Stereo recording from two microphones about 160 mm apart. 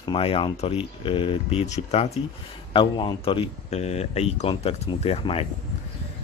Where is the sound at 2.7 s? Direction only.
30° left (ahead or behind).